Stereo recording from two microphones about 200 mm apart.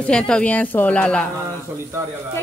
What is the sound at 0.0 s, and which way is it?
A woman's voice, 5° left (ahead or behind).